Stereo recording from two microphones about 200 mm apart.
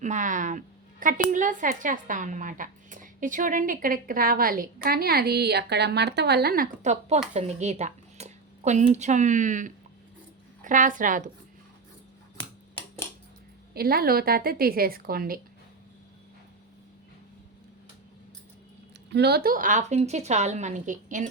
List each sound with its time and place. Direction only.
0.0 s a woman's voice: 40° right (ahead or behind)
13.7 s a woman's voice: 50° right (ahead or behind)
19.1 s a woman's voice: 55° right (ahead or behind); by 21.2 s 40° right (ahead or behind)